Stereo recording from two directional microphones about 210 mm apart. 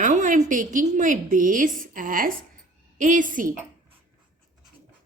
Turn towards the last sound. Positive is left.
turn(degrees=-40)  # may be behind; listen again after turning